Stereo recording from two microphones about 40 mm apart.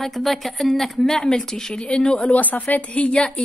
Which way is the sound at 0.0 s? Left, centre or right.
Centre.